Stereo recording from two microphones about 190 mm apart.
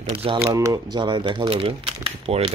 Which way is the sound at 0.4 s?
15° right (ahead or behind).